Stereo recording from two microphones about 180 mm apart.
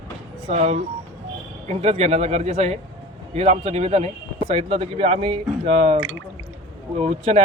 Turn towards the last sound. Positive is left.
turn(degrees=-35)  # may be behind; listen again after turning